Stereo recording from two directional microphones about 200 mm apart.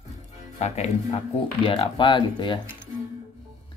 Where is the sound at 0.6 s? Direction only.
35° left (ahead or behind).